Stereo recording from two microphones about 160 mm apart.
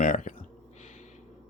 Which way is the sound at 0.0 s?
55° left (ahead or behind).